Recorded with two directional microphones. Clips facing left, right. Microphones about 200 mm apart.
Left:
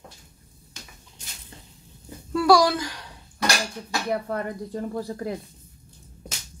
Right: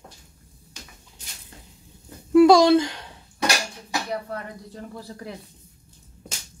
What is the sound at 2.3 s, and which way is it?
Dishes, 20° right (ahead or behind).